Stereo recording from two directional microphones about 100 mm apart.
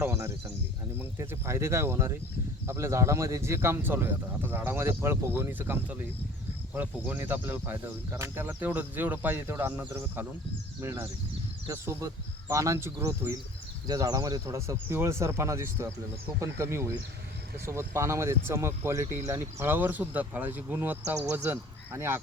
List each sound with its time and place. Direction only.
0.0 s speech: 20° right (ahead or behind)
13.8 s speech: 40° right (ahead or behind)
14.4 s speech: 30° right (ahead or behind)